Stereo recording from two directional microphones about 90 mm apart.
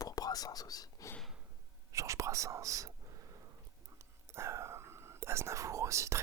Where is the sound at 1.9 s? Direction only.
35° right (ahead or behind).